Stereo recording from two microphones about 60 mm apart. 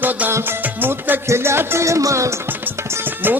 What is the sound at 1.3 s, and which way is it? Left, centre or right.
Speech, right.